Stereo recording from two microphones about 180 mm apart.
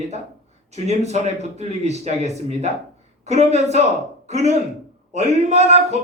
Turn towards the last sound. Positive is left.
turn(degrees=-35)  # may be behind; listen again after turning